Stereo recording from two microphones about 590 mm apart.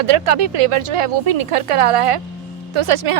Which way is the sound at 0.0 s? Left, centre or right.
Right.